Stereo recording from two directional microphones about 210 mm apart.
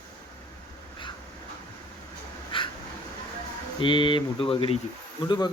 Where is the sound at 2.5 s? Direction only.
25° left (ahead or behind).